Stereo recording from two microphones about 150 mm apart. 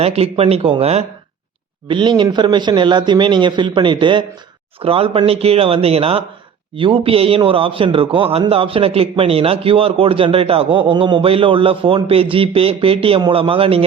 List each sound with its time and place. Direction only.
0.0 s a man's voice: 40° right (ahead or behind)
1.9 s a man's voice: 30° right (ahead or behind)